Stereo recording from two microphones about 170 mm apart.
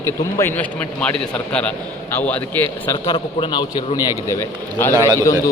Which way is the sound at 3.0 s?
30° left (ahead or behind).